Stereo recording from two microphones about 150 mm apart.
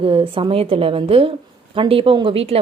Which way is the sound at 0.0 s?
40° right (ahead or behind).